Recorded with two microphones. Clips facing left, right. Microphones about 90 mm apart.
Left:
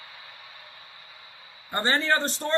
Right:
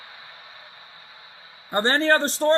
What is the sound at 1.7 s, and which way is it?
Speech, 35° right (ahead or behind).